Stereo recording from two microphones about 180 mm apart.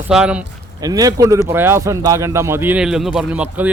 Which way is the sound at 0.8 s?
20° right (ahead or behind).